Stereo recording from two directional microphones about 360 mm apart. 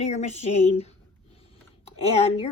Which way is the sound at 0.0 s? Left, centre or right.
Centre.